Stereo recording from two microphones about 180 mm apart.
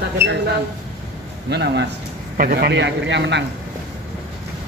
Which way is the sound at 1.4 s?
70° right (ahead or behind).